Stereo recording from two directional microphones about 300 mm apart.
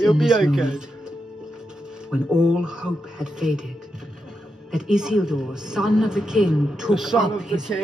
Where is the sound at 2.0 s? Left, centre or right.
Centre.